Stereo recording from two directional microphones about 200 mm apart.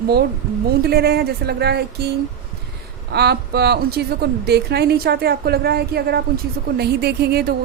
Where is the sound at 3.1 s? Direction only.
55° right (ahead or behind).